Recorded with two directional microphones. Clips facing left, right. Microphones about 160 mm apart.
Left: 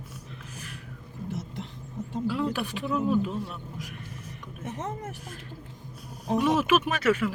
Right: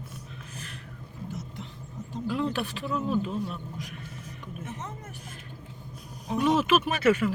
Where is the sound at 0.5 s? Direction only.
10° left (ahead or behind).